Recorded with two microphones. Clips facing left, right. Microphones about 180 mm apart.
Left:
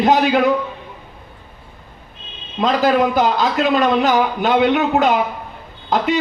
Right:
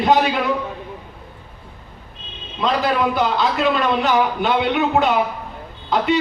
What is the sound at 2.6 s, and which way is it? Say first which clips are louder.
A man's voice: left 4 dB; 45° left (ahead or behind).